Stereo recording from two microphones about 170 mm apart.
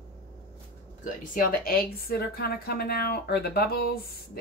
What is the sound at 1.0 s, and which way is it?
Speech, 55° left (ahead or behind).